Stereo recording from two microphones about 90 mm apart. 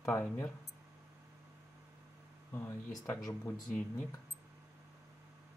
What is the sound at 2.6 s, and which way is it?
Speech, 30° left (ahead or behind).